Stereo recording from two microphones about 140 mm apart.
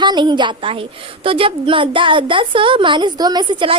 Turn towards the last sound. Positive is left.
turn(degrees=-35)  # may be behind; listen again after turning